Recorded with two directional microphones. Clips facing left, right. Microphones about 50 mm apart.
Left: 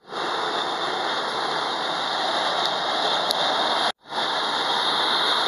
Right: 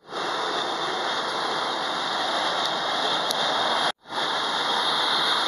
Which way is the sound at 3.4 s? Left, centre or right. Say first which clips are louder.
Even; centre.